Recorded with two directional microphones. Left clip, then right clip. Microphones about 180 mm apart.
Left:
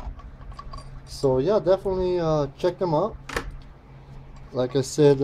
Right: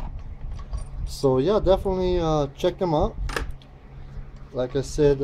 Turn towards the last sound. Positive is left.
turn(degrees=20)  # may be behind; listen again after turning